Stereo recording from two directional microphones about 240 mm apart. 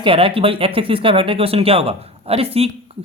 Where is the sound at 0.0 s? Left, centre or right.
Right.